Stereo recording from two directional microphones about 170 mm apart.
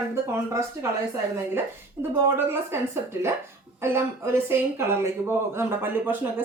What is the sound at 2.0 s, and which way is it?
Speech, 15° right (ahead or behind).